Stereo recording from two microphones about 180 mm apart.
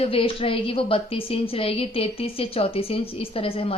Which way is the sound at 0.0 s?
30° left (ahead or behind).